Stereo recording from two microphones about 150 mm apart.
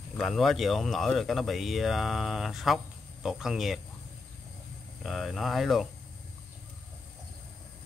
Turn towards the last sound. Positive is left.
turn(degrees=0)  # may be behind; listen again after turning